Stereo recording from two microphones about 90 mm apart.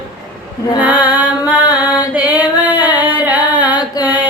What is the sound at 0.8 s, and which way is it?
Music, 20° right (ahead or behind).